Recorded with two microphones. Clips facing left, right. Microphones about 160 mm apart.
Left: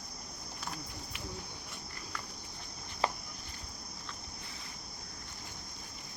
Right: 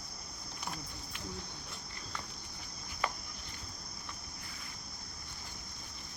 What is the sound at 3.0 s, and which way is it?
Cricket, 30° left (ahead or behind).